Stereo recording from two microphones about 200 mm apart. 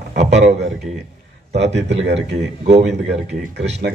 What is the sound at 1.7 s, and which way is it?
Speech, 60° right (ahead or behind).